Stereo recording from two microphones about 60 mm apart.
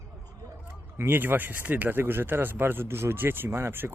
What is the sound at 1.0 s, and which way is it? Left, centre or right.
Speech, right.